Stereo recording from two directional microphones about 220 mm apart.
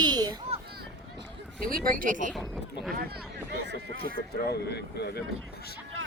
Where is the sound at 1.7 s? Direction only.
40° right (ahead or behind).